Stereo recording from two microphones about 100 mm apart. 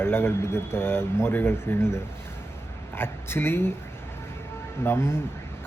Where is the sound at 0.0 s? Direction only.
25° left (ahead or behind).